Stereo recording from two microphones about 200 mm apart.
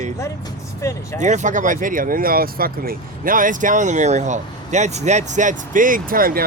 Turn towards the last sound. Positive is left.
turn(degrees=-45)  # may be behind; listen again after turning